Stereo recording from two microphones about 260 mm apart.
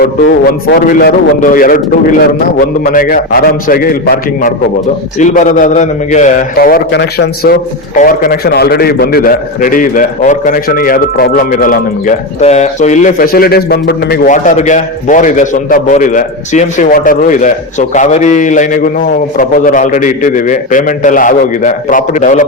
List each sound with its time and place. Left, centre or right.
0.0 s a man's voice: left